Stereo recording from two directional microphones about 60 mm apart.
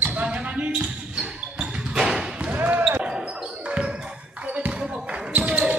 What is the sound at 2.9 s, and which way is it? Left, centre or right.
Basketball bounce, centre.